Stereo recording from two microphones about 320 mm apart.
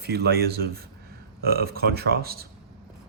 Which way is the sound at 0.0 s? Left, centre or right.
Right.